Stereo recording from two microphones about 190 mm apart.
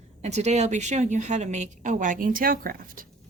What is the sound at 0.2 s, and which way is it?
A woman's voice, 35° right (ahead or behind).